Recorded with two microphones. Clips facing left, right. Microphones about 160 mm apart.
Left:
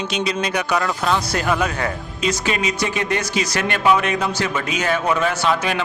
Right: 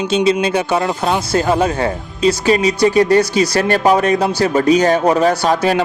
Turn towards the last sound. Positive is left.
turn(degrees=-40)  # may be behind; listen again after turning